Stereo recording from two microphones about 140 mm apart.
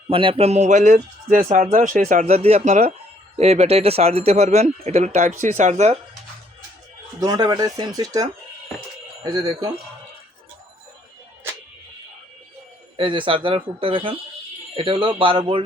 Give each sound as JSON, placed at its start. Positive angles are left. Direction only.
{"t": 0.1, "sound": "speech", "side_deg": -40}
{"t": 2.2, "sound": "speech", "side_deg": -50}
{"t": 7.2, "sound": "speech", "side_deg": -30}
{"t": 13.0, "sound": "speech", "side_deg": -35}